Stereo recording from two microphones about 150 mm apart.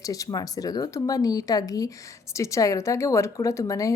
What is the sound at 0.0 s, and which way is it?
A woman's voice, 25° left (ahead or behind).